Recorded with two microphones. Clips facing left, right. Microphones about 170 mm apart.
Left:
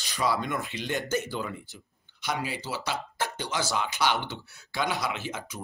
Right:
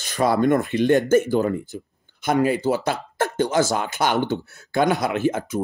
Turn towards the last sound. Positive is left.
turn(degrees=-50)  # may be behind; listen again after turning